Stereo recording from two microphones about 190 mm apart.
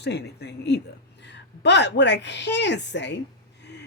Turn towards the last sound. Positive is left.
turn(degrees=65)  # may be behind; listen again after turning